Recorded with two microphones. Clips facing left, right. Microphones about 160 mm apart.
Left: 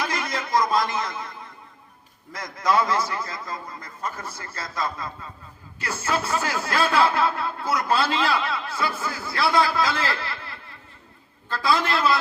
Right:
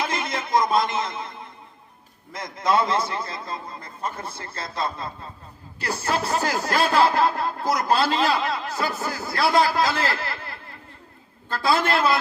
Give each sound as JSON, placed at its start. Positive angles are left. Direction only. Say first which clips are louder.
{"t": 0.0, "sound": "a sound", "louder": "right 1 dB", "side_deg": -25}
{"t": 2.3, "sound": "a man's voice", "louder": "even", "side_deg": -25}
{"t": 11.5, "sound": "a man's voice", "louder": "right 2 dB", "side_deg": -50}